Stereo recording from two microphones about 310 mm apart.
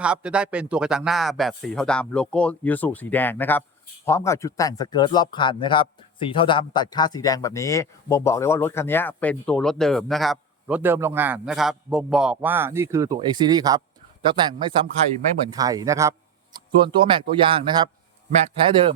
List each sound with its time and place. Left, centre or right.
0.0 s speech: centre